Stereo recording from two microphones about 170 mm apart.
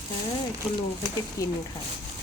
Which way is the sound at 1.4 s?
20° left (ahead or behind).